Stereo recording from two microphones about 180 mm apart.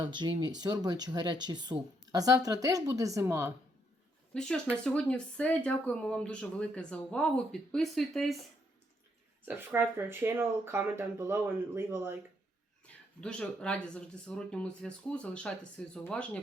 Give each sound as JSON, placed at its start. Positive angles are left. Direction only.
{"t": 0.0, "sound": "speech", "side_deg": -25}
{"t": 4.4, "sound": "speech", "side_deg": 5}
{"t": 9.5, "sound": "speech", "side_deg": -10}
{"t": 12.8, "sound": "speech", "side_deg": 5}